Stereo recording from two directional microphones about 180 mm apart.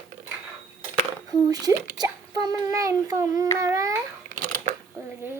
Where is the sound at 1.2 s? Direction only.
20° right (ahead or behind).